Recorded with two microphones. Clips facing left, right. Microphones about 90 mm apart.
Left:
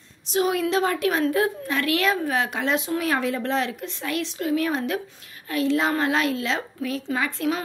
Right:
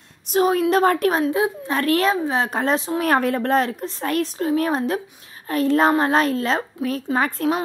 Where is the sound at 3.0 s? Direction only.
50° right (ahead or behind).